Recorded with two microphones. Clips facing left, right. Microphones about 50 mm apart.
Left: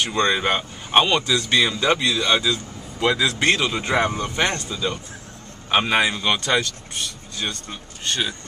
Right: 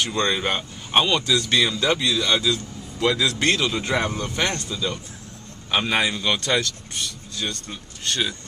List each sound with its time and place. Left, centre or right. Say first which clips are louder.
0.0 s speech: left 2 dB; centre
6.4 s speech: left 1 dB; centre
7.3 s speech: left 1 dB; left
8.0 s speech: even; centre